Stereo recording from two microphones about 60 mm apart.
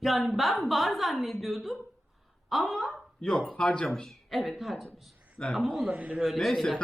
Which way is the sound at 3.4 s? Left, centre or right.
Centre.